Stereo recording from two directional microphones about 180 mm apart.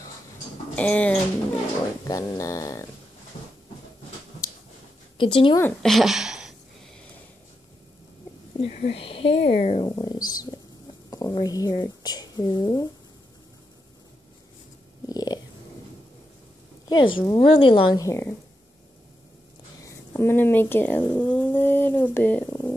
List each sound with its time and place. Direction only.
0.7 s dog: 5° left (ahead or behind)
2.0 s dog: 20° left (ahead or behind)
5.1 s speech: 30° left (ahead or behind)
5.6 s a woman's voice: 5° left (ahead or behind)
8.5 s speech: 40° left (ahead or behind)
9.8 s speech: 20° left (ahead or behind)
15.0 s stomach rumble: 20° left (ahead or behind)
16.8 s a woman's voice: 25° left (ahead or behind)
19.8 s speech: 15° left (ahead or behind)